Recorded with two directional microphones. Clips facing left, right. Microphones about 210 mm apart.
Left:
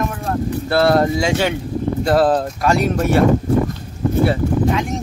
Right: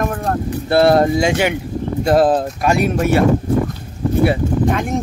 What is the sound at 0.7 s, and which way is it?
Speech, 20° right (ahead or behind).